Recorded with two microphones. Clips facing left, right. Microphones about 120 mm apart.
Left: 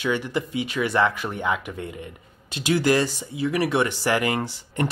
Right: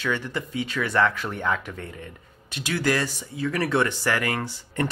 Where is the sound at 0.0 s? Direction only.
15° left (ahead or behind).